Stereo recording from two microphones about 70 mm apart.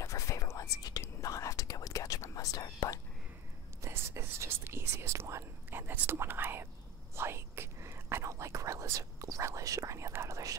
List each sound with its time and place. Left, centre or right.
0.0 s whispering: left
3.8 s whispering: right